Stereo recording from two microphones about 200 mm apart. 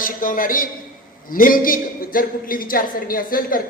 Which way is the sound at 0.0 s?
45° left (ahead or behind).